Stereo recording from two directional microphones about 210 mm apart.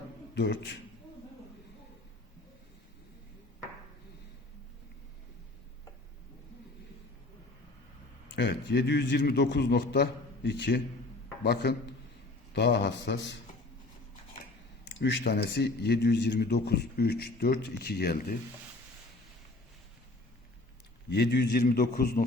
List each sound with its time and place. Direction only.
0.3 s a man's voice: 55° left (ahead or behind)
8.4 s a man's voice: 55° left (ahead or behind)
15.0 s a man's voice: 55° left (ahead or behind)
21.1 s a man's voice: 50° left (ahead or behind)